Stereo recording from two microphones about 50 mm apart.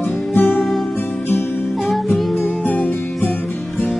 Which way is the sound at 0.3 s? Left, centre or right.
Left.